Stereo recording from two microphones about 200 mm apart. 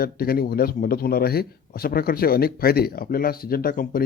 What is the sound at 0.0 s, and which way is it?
A man's voice, 50° left (ahead or behind).